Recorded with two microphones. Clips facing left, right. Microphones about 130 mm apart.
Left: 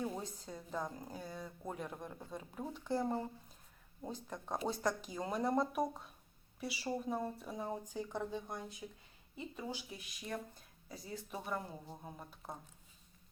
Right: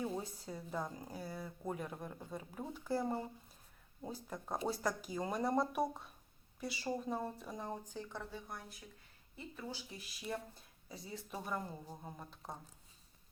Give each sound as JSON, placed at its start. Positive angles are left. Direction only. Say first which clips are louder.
{"t": 0.2, "sound": "speech", "louder": "right 1 dB", "side_deg": -5}
{"t": 9.9, "sound": "speech", "louder": "even", "side_deg": 0}